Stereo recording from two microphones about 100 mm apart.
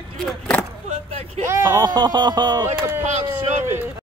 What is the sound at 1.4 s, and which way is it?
Speech, 25° right (ahead or behind).